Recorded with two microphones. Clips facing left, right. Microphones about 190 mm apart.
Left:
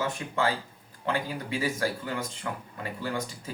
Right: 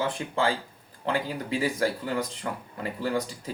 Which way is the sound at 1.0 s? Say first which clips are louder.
Right 2 dB; 35° right (ahead or behind).